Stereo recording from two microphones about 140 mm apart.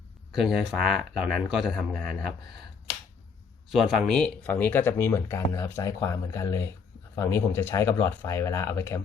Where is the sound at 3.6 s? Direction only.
Centre (ahead or behind).